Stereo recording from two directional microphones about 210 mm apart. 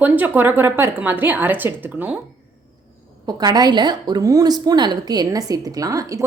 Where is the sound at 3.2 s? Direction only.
20° right (ahead or behind).